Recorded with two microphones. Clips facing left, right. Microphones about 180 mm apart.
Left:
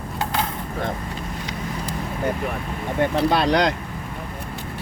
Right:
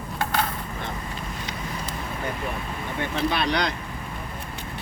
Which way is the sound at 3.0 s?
45° left (ahead or behind).